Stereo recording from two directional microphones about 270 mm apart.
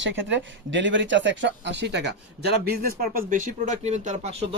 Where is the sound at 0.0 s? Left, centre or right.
Right.